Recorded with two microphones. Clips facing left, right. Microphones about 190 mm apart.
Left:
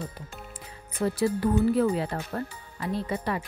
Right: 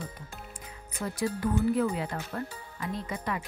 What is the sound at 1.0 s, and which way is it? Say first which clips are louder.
Speech: left 5 dB; 30° left (ahead or behind).